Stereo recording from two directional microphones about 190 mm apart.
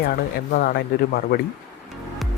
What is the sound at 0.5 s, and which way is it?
Speech, 50° left (ahead or behind).